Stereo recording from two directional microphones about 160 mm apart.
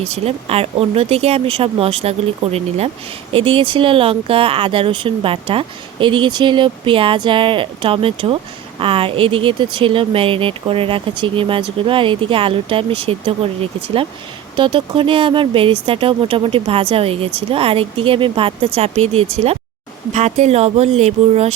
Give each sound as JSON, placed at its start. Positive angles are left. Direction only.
{"t": 0.0, "sound": "speech", "side_deg": -40}